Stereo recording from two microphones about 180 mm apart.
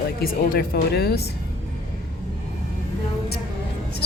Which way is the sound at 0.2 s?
55° left (ahead or behind).